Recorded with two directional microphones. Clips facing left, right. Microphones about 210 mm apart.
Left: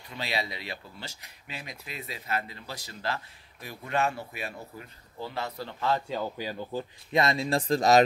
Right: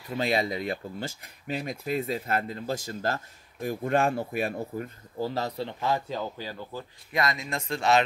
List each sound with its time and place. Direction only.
0.1 s speech: 45° right (ahead or behind)
5.6 s a man's voice: 20° right (ahead or behind)
6.3 s speech: 15° left (ahead or behind); by 8.0 s 40° left (ahead or behind)